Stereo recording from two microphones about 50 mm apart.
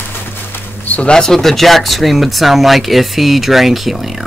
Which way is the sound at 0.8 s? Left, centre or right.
Left.